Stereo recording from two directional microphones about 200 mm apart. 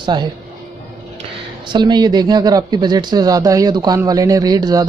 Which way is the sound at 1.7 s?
20° right (ahead or behind).